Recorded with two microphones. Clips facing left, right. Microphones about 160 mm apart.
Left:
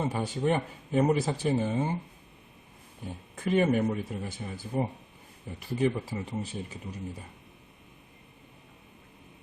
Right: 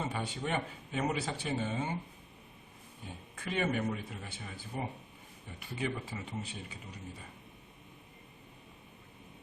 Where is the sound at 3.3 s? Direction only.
40° left (ahead or behind).